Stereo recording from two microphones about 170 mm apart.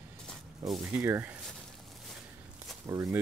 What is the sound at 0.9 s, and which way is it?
Speech, 15° right (ahead or behind).